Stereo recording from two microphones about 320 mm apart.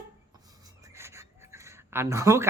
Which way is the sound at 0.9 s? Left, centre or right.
Centre.